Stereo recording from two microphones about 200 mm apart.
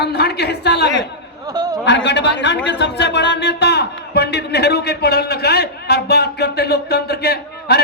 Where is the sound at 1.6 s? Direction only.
20° right (ahead or behind).